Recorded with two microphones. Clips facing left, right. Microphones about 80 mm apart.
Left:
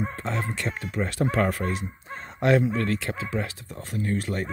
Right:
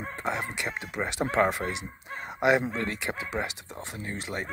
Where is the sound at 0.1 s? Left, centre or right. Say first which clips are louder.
Left 1 dB; centre.